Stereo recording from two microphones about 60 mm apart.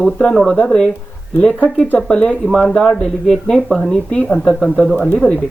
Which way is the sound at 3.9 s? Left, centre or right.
Centre.